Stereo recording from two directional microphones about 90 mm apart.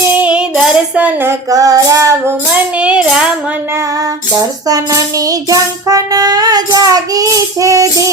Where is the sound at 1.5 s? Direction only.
40° right (ahead or behind).